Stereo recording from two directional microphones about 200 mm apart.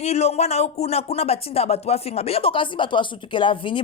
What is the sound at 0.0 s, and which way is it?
A man's voice, 30° left (ahead or behind).